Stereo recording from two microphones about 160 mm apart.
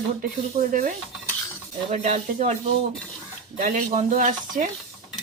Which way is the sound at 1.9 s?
45° right (ahead or behind).